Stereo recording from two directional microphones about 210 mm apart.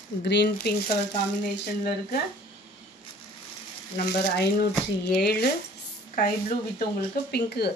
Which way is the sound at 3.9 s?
50° left (ahead or behind).